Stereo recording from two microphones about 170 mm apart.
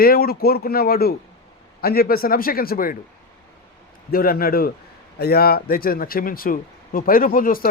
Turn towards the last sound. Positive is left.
turn(degrees=55)  # may be behind; listen again after turning